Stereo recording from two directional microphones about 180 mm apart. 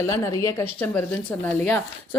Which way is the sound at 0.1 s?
15° left (ahead or behind).